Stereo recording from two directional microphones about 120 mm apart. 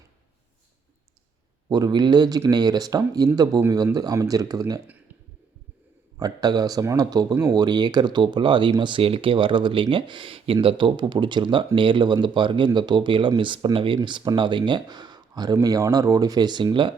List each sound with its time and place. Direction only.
1.7 s speech: 35° right (ahead or behind)
6.1 s speech: 35° right (ahead or behind)